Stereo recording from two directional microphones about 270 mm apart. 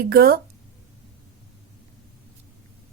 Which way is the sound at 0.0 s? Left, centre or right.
Right.